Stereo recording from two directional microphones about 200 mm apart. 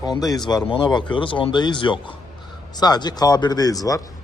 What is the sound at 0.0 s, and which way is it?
A man's voice, 20° left (ahead or behind).